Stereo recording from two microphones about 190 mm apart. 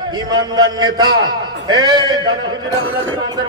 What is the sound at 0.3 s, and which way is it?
A man's voice, 20° right (ahead or behind).